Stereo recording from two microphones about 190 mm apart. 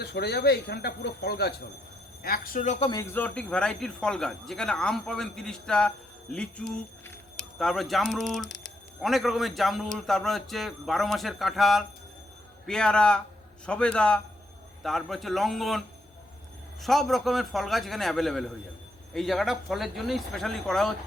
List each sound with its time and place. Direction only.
0.0 s speech: 60° left (ahead or behind); by 2.9 s 35° left (ahead or behind)
2.9 s speech: 15° left (ahead or behind)
16.8 s speech: centre (ahead or behind)